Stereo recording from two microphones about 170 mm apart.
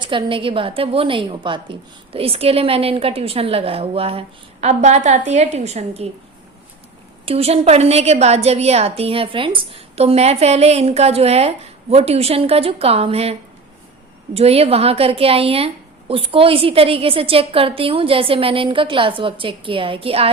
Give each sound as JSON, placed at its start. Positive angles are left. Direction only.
{"t": 0.0, "sound": "a woman's voice", "side_deg": -30}
{"t": 7.3, "sound": "a woman's voice", "side_deg": -35}
{"t": 14.3, "sound": "a woman's voice", "side_deg": -35}